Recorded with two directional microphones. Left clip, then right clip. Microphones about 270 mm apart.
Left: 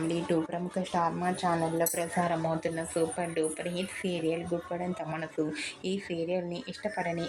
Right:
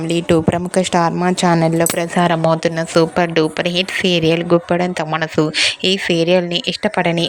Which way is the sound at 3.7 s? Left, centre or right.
Right.